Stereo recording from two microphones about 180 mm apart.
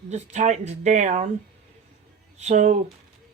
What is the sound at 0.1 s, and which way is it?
Speech, 40° right (ahead or behind).